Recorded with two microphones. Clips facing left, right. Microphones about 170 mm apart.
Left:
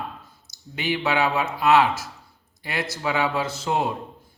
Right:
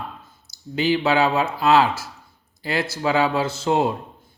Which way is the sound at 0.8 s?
30° right (ahead or behind).